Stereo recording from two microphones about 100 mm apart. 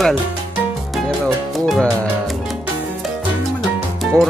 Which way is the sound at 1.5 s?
Centre (ahead or behind).